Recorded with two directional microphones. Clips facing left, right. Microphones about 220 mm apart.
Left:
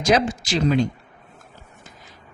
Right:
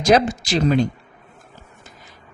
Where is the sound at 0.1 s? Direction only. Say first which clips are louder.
Right 4 dB; 50° right (ahead or behind).